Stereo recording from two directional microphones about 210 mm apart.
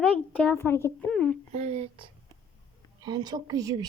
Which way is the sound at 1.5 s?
30° right (ahead or behind).